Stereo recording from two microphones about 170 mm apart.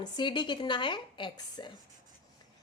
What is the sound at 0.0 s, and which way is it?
A woman's voice, 25° left (ahead or behind).